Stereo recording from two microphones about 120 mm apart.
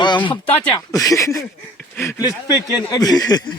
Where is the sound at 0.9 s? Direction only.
30° left (ahead or behind).